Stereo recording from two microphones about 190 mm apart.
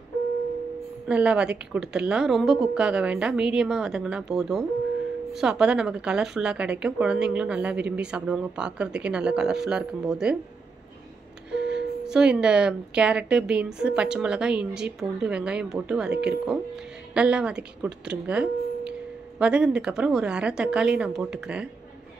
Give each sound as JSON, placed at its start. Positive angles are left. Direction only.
{"t": 1.0, "sound": "a woman's voice", "side_deg": -5}
{"t": 11.5, "sound": "a woman's voice", "side_deg": -5}
{"t": 16.1, "sound": "speech", "side_deg": -60}
{"t": 17.1, "sound": "a woman's voice", "side_deg": -5}